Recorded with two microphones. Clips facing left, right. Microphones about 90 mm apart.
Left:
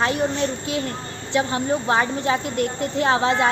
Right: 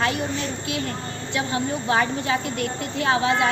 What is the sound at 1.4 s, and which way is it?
A woman's voice, 35° left (ahead or behind).